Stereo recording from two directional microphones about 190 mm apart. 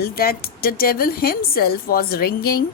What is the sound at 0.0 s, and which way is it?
A woman's voice, 50° left (ahead or behind).